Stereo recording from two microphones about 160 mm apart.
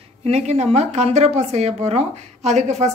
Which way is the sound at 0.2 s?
45° right (ahead or behind).